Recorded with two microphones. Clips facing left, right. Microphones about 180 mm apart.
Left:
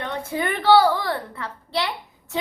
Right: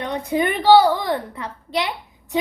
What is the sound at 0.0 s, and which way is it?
A woman's voice, 15° right (ahead or behind).